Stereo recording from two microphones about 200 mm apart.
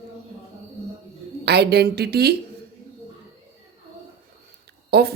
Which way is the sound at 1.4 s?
55° right (ahead or behind).